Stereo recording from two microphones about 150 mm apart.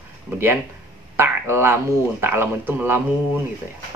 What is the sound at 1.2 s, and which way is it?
Speech, 15° right (ahead or behind).